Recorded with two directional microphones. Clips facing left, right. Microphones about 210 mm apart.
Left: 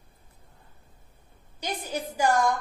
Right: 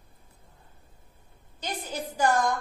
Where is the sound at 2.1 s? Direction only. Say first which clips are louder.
Left 1 dB; 10° left (ahead or behind).